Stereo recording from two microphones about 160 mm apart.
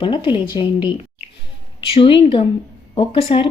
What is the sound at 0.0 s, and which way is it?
Speech, 30° left (ahead or behind).